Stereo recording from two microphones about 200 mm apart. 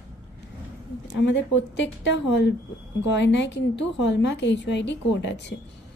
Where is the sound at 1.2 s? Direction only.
65° left (ahead or behind).